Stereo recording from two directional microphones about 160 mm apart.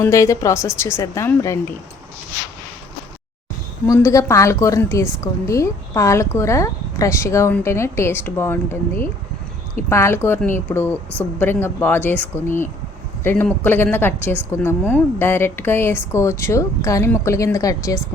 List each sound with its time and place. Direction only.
0.0 s a woman's voice: 20° left (ahead or behind)
3.8 s a woman's voice: 20° left (ahead or behind)